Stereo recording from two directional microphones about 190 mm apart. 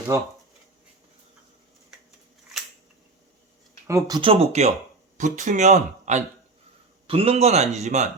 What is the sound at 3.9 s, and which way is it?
Speech, 15° right (ahead or behind).